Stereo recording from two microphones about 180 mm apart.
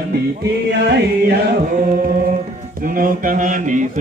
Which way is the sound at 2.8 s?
50° right (ahead or behind).